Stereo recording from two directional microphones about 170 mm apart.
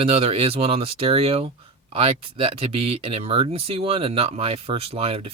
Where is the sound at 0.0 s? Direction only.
35° right (ahead or behind).